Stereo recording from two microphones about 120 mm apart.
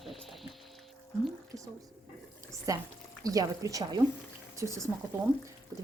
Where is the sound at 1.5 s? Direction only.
25° right (ahead or behind).